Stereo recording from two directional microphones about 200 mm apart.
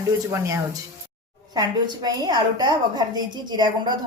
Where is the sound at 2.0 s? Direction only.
20° right (ahead or behind).